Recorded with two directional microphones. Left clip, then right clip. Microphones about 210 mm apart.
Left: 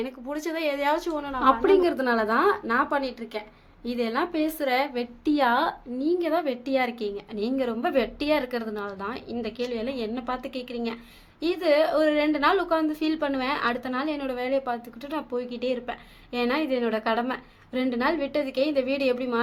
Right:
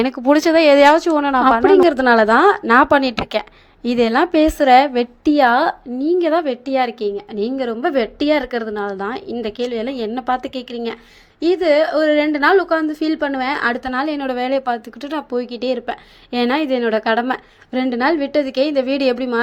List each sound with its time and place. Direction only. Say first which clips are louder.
0.0 s a woman's voice: right 17 dB; 45° right (ahead or behind)